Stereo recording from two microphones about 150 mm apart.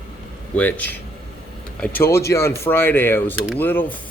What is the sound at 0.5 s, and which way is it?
Speech, 10° left (ahead or behind).